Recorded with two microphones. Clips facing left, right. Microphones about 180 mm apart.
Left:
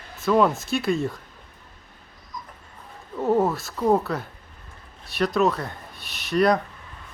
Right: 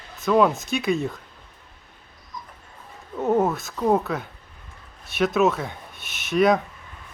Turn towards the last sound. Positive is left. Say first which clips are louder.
# right 1 dB
turn(degrees=0)  # may be behind; listen again after turning